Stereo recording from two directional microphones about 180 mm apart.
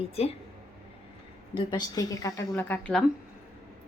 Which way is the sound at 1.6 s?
25° left (ahead or behind).